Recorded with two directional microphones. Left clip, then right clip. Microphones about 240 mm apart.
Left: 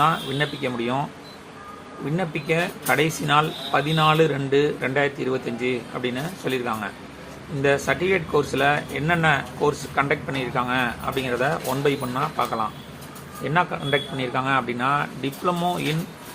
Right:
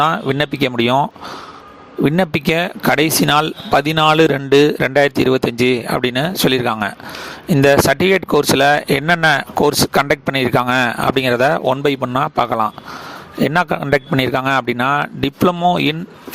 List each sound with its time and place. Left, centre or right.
0.0 s speech: right
2.1 s speech: right